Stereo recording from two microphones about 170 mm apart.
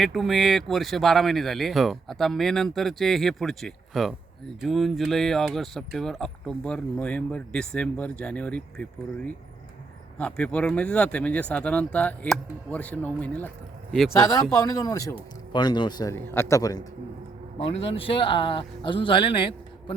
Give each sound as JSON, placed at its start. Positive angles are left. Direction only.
{"t": 0.0, "sound": "speech", "side_deg": 0}
{"t": 14.2, "sound": "speech", "side_deg": 20}
{"t": 16.1, "sound": "speech", "side_deg": 15}
{"t": 17.7, "sound": "speech", "side_deg": 35}